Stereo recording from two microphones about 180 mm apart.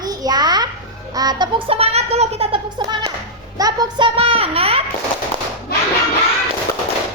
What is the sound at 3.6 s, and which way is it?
A child's voice, 20° right (ahead or behind).